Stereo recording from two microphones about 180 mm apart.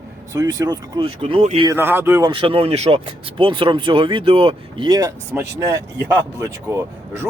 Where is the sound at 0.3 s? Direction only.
20° right (ahead or behind).